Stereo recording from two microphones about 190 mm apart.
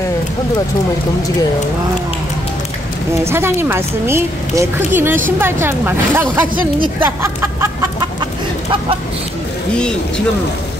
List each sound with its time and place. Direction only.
3.3 s a woman's voice: 15° right (ahead or behind)
7.0 s chicken: 15° right (ahead or behind)